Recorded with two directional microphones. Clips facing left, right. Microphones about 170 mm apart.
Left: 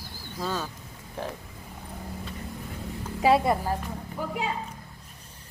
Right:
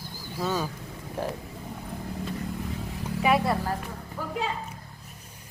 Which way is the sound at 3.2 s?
25° left (ahead or behind).